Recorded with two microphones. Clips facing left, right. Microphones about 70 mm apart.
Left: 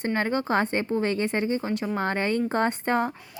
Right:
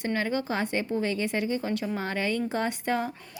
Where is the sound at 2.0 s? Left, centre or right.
Left.